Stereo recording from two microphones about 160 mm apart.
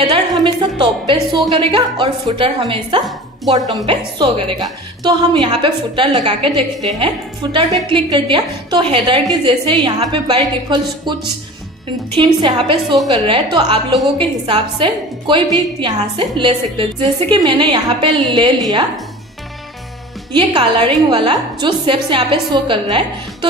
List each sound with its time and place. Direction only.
0.0 s a woman's voice: 30° right (ahead or behind)
12.2 s a woman's voice: 30° right (ahead or behind)
20.3 s a woman's voice: 30° right (ahead or behind)